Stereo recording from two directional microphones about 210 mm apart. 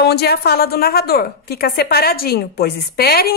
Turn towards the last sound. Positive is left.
turn(degrees=45)  # may be behind; listen again after turning